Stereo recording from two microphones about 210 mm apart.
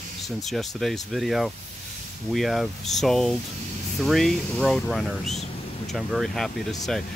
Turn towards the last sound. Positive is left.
turn(degrees=0)  # may be behind; listen again after turning